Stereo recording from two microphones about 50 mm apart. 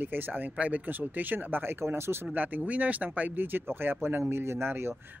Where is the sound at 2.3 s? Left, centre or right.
Right.